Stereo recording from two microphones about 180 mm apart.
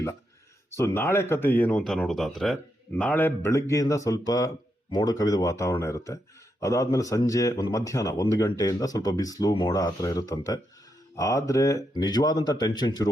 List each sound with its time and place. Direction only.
0.8 s speech: 15° left (ahead or behind)